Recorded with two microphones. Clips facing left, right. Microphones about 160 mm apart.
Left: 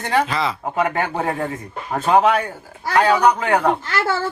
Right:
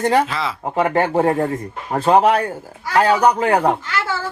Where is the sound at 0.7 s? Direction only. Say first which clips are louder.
Right 6 dB; 30° right (ahead or behind).